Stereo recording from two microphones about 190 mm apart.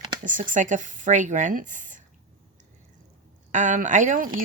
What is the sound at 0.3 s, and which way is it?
Speech, 45° right (ahead or behind).